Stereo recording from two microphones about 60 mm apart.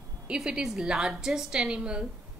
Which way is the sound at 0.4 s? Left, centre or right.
Centre.